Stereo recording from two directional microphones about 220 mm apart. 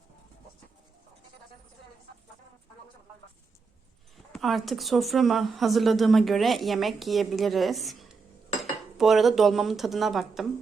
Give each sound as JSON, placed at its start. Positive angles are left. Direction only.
{"t": 4.3, "sound": "speech", "side_deg": 0}